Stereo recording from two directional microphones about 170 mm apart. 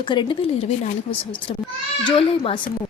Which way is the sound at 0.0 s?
30° left (ahead or behind).